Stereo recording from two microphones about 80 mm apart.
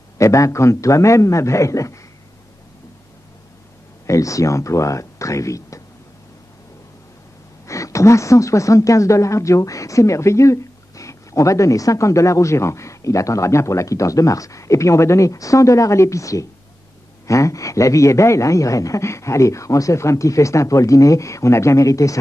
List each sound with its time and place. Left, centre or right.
0.2 s speech: left
4.1 s speech: left
7.6 s speech: left